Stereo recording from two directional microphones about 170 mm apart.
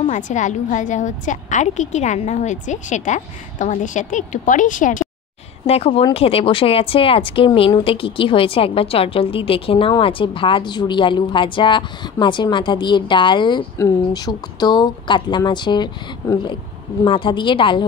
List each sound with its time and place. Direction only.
0.0 s a woman's voice: 45° left (ahead or behind)
5.7 s speech: 35° left (ahead or behind)